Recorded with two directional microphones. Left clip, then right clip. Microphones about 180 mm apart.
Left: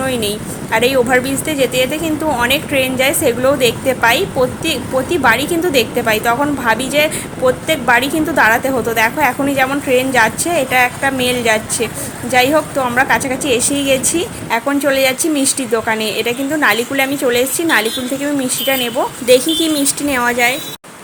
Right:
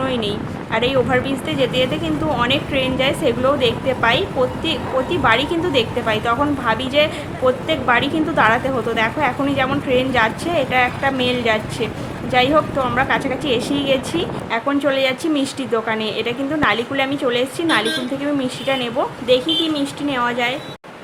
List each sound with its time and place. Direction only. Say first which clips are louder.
0.0 s a woman's voice: left 3 dB; 20° left (ahead or behind)
19.3 s speech: left 5 dB; 35° left (ahead or behind)